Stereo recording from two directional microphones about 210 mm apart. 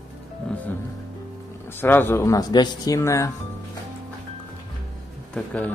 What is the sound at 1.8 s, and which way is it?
Speech, 10° left (ahead or behind).